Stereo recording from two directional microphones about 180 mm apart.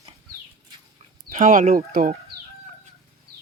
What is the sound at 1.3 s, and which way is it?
Speech, 45° right (ahead or behind).